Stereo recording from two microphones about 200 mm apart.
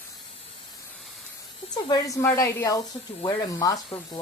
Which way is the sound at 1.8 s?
20° left (ahead or behind).